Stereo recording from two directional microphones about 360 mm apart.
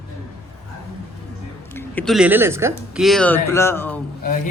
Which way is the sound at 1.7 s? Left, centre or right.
Centre.